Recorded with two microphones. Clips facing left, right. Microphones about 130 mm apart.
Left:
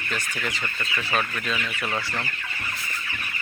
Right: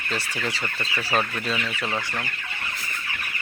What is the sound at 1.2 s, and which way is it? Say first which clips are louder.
Speech: right 2 dB; 30° right (ahead or behind).